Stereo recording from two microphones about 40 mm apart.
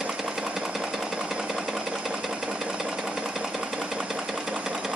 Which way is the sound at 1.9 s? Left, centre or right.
Right.